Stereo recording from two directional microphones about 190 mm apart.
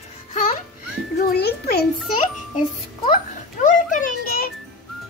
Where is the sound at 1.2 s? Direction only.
55° left (ahead or behind).